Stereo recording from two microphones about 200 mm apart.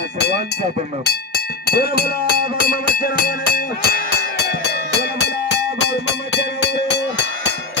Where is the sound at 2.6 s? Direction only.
45° left (ahead or behind).